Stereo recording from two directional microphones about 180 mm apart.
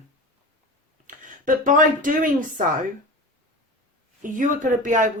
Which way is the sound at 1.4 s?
50° right (ahead or behind).